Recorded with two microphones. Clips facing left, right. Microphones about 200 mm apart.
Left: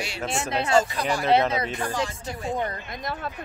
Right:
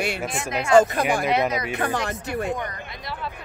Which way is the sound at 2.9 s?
45° left (ahead or behind).